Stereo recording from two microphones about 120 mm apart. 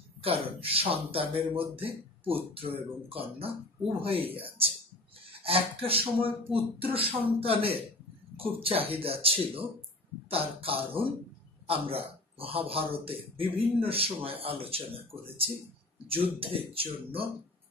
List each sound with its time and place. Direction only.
0.2 s a man's voice: 50° right (ahead or behind)